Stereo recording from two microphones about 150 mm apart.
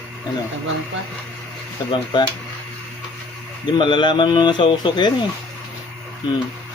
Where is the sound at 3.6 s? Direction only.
30° left (ahead or behind).